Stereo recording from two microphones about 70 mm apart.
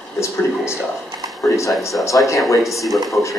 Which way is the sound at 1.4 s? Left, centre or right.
Left.